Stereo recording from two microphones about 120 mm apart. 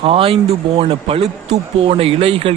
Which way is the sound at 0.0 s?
50° right (ahead or behind).